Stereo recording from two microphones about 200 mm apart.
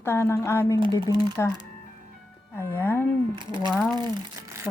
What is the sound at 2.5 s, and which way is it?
Speech, 10° left (ahead or behind).